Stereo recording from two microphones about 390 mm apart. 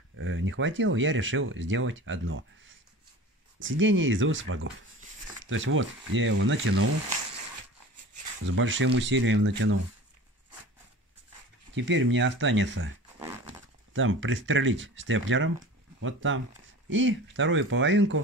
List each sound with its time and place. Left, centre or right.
0.1 s speech: right
8.5 s speech: right
11.7 s speech: right
13.9 s speech: right